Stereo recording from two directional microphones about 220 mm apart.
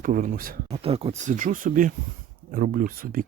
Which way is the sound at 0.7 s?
25° right (ahead or behind).